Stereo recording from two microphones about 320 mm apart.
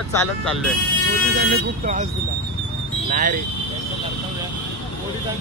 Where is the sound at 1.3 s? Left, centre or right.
Right.